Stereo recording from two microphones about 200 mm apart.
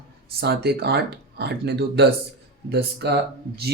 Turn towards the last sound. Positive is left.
turn(degrees=-55)  # may be behind; listen again after turning